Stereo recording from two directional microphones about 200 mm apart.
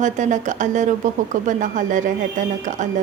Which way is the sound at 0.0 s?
40° right (ahead or behind).